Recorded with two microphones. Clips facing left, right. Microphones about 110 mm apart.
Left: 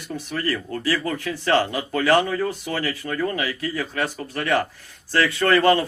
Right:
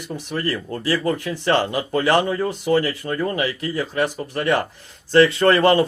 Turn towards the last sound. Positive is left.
turn(degrees=-25)  # may be behind; listen again after turning